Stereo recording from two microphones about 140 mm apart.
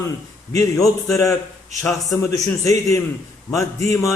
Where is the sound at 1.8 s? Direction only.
Centre (ahead or behind).